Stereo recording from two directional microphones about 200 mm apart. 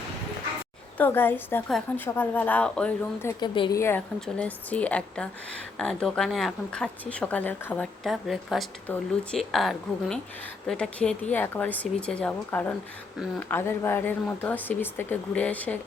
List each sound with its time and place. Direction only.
0.9 s a woman's voice: 10° left (ahead or behind)
3.5 s a woman's voice: 25° left (ahead or behind)
3.8 s a woman's voice: 10° left (ahead or behind)